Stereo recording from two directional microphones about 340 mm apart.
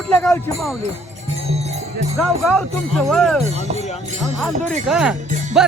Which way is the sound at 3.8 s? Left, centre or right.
Centre.